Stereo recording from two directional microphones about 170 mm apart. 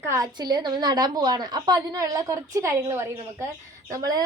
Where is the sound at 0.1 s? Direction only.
20° right (ahead or behind).